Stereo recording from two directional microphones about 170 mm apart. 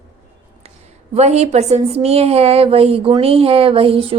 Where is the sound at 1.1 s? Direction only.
40° right (ahead or behind).